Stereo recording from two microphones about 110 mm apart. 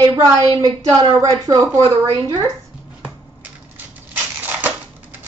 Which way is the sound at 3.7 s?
15° right (ahead or behind).